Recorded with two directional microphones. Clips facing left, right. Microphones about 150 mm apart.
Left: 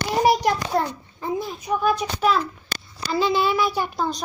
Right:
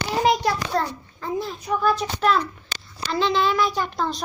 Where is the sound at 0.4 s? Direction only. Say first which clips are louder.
Left 2 dB; 15° left (ahead or behind).